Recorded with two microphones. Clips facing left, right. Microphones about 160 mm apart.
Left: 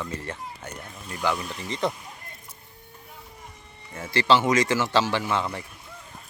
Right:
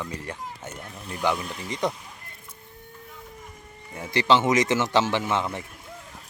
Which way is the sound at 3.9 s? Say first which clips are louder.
Even; 15° right (ahead or behind).